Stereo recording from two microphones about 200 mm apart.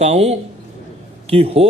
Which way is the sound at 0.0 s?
30° right (ahead or behind).